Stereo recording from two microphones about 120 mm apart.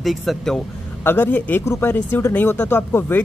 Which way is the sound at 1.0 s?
15° left (ahead or behind).